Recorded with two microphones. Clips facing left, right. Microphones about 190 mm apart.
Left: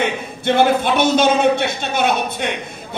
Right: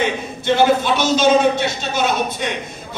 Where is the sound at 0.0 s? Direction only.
55° left (ahead or behind).